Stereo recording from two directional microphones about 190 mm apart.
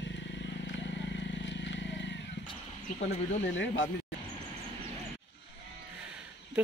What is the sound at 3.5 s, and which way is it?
Speech, 80° left.